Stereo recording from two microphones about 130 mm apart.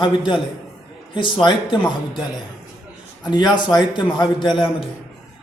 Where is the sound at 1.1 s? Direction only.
40° left (ahead or behind).